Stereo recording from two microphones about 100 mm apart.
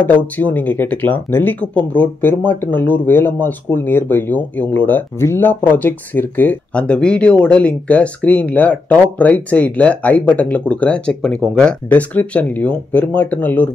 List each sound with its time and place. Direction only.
0.0 s speech: 15° left (ahead or behind)